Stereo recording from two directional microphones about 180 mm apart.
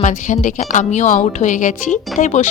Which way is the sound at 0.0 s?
45° left (ahead or behind).